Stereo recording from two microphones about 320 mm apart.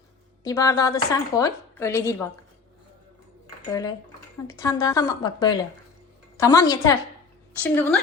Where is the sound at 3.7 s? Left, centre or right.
Centre.